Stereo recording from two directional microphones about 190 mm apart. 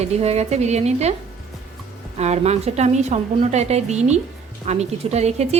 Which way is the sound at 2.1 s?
35° right (ahead or behind).